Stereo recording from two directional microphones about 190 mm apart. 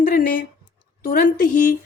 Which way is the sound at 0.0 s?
45° left (ahead or behind).